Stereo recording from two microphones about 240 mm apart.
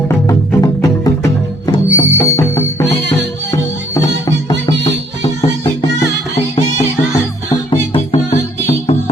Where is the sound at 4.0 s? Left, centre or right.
Centre.